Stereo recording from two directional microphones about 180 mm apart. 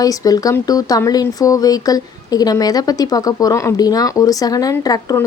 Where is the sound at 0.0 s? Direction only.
20° left (ahead or behind).